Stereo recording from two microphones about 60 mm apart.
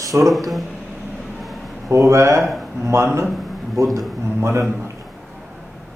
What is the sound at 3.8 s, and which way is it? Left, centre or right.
Speech, right.